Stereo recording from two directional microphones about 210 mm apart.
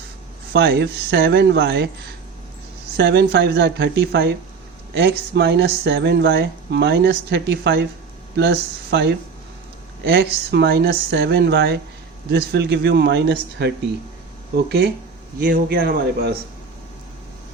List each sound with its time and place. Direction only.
0.5 s speech: 55° right (ahead or behind)
3.0 s speech: 55° right (ahead or behind)